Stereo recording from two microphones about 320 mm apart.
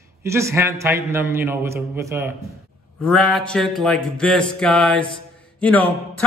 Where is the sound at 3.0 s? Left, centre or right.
Centre.